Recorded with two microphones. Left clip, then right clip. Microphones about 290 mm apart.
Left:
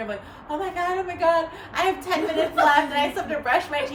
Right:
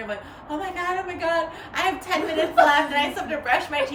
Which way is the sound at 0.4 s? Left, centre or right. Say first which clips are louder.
Left 2 dB; centre.